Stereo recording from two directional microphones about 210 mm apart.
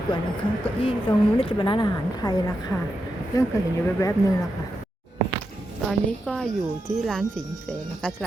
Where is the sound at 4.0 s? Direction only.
15° left (ahead or behind).